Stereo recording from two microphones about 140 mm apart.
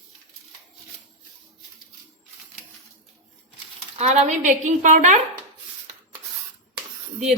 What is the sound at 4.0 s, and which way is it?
A woman's voice, 55° right (ahead or behind).